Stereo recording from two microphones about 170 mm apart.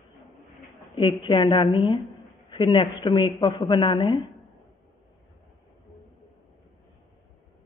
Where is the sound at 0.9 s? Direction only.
30° left (ahead or behind).